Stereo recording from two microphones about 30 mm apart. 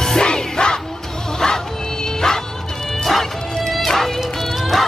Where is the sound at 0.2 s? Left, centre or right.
Left.